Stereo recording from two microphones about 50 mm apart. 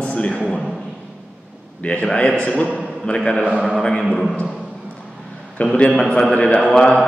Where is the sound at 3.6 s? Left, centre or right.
Centre.